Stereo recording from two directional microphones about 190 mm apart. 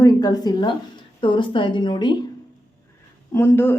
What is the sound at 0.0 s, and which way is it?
A woman's voice, 20° left (ahead or behind).